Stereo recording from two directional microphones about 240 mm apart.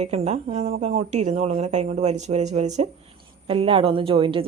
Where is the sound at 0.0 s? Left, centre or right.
Right.